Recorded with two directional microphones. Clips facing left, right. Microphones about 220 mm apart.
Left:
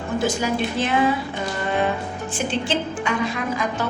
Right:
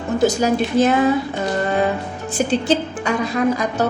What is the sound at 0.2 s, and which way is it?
Speech, 40° right (ahead or behind).